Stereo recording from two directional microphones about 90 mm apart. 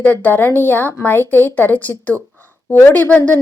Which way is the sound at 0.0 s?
15° left (ahead or behind).